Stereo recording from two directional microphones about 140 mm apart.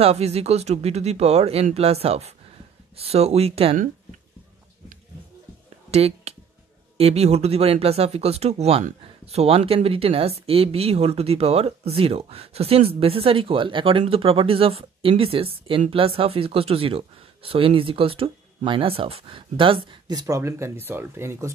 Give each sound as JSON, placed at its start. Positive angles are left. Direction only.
{"t": 0.0, "sound": "speech", "side_deg": -50}
{"t": 5.9, "sound": "a sound", "side_deg": -45}
{"t": 7.0, "sound": "speech", "side_deg": -45}